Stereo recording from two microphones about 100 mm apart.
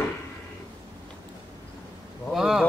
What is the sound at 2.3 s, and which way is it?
Speech, 5° right (ahead or behind).